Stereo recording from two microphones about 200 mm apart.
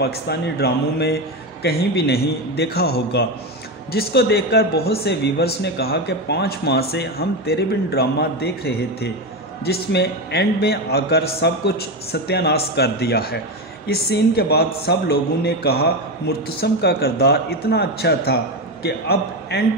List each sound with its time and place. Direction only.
0.0 s a man's voice: 55° left (ahead or behind)